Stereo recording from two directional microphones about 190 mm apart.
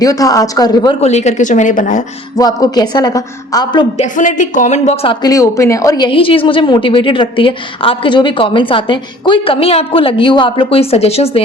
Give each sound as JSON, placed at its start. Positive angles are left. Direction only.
{"t": 0.0, "sound": "a woman's voice", "side_deg": 20}
{"t": 1.0, "sound": "speech", "side_deg": 35}
{"t": 2.3, "sound": "a woman's voice", "side_deg": 20}
{"t": 3.9, "sound": "speech", "side_deg": 40}
{"t": 5.2, "sound": "a woman's voice", "side_deg": 15}